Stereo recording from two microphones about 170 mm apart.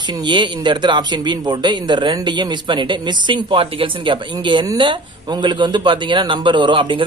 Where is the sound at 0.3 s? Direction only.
25° right (ahead or behind).